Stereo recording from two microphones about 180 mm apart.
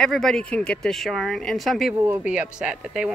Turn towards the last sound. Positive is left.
turn(degrees=-5)  # may be behind; listen again after turning